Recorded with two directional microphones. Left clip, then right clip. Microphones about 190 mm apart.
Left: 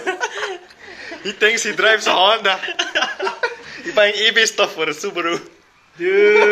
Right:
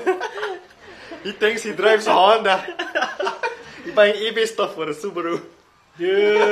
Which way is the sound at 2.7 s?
35° right (ahead or behind).